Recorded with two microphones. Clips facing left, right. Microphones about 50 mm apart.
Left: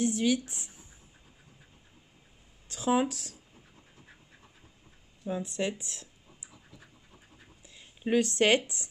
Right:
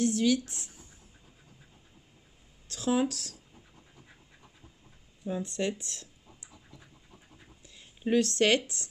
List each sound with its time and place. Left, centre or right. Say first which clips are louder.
0.0 s speech: right 1 dB; centre
2.7 s speech: left 1 dB; centre
5.2 s scratch: even; centre
7.6 s speech: right 1 dB; centre